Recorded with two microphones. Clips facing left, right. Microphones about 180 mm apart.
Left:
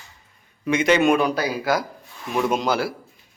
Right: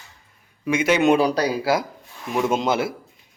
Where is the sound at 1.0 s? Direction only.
30° right (ahead or behind).